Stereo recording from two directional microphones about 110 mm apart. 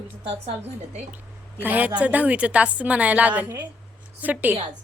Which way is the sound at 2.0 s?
15° right (ahead or behind).